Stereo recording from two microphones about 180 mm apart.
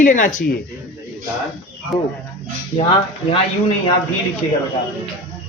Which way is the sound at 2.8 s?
35° left (ahead or behind).